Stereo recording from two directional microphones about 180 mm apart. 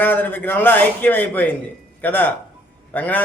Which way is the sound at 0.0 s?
10° left (ahead or behind).